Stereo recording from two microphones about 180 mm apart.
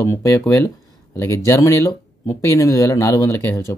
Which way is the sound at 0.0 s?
15° left (ahead or behind).